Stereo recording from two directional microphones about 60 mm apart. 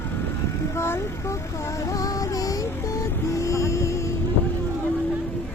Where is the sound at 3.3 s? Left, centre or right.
Left.